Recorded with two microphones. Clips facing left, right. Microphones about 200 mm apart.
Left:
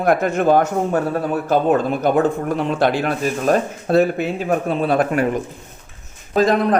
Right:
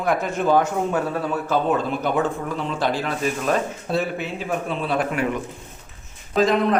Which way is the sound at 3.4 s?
45° left (ahead or behind).